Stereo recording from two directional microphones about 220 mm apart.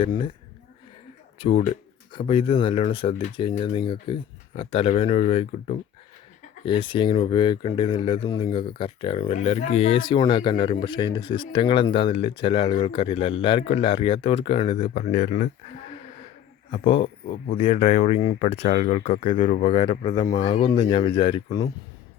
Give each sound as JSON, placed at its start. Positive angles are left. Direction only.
{"t": 0.0, "sound": "speech", "side_deg": 25}
{"t": 1.4, "sound": "speech", "side_deg": 25}
{"t": 16.7, "sound": "speech", "side_deg": 25}